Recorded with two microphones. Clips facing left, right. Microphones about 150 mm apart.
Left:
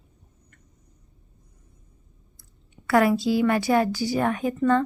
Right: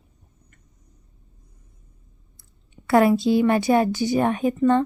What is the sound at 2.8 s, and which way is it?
Speech, 25° right (ahead or behind).